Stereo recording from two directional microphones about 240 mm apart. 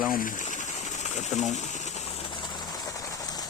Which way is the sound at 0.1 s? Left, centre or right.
Left.